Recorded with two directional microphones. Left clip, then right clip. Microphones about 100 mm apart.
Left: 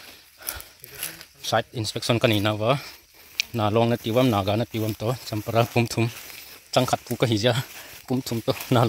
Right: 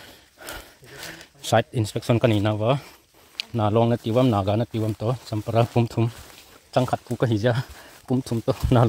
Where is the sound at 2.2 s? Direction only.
5° right (ahead or behind).